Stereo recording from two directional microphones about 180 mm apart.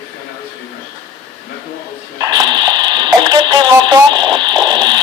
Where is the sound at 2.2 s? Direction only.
20° right (ahead or behind).